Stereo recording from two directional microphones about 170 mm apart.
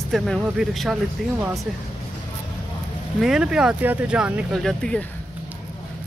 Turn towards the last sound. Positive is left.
turn(degrees=5)  # may be behind; listen again after turning